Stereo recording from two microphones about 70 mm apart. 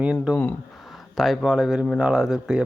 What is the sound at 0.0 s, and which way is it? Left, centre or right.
Speech, centre.